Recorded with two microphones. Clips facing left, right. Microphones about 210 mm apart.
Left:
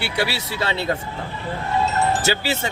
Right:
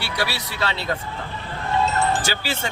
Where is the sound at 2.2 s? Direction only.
20° left (ahead or behind).